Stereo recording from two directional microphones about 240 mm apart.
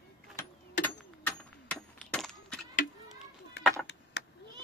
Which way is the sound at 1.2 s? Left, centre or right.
Centre.